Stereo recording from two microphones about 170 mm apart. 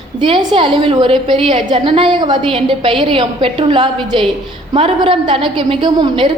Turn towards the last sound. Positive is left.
turn(degrees=-30)  # may be behind; listen again after turning